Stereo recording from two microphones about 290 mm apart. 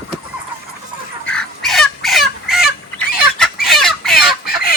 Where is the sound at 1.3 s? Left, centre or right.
Centre.